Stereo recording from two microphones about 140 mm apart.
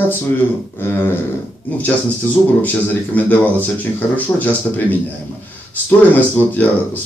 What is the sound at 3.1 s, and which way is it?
Speech, 10° left (ahead or behind).